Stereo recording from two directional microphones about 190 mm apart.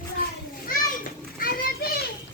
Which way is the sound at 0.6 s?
45° left (ahead or behind).